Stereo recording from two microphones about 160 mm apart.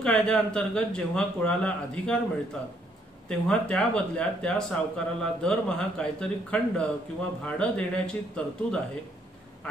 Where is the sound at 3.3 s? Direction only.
5° left (ahead or behind).